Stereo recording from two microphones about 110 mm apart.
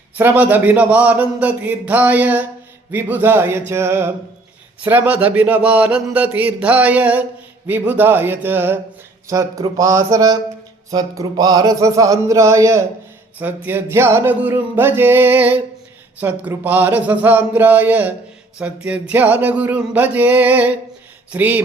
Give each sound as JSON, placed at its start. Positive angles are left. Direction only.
{"t": 0.2, "sound": "a man's voice", "side_deg": -15}
{"t": 9.3, "sound": "a sound", "side_deg": -30}
{"t": 13.4, "sound": "a man's voice", "side_deg": -20}